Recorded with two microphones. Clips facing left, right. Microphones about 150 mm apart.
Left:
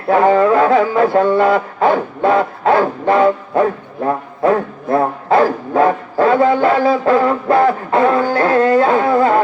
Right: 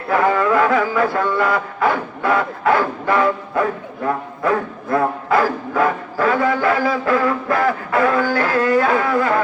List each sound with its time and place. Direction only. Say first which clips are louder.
0.1 s music: left 5 dB; 30° left (ahead or behind)